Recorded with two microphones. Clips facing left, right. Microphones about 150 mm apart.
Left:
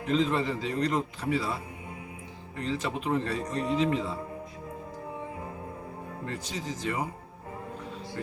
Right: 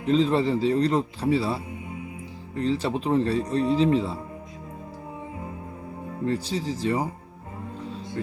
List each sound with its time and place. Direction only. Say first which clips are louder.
0.0 s a man's voice: right 5 dB; 30° right (ahead or behind)
6.2 s a man's voice: right 10 dB; 30° right (ahead or behind)